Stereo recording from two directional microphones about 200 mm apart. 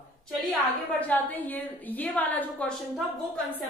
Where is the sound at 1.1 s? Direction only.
10° left (ahead or behind).